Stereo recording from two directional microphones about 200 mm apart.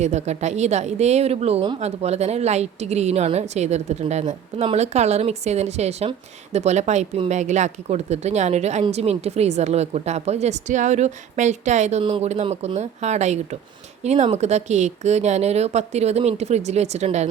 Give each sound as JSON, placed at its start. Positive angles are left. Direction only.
{"t": 0.0, "sound": "a woman's voice", "side_deg": -35}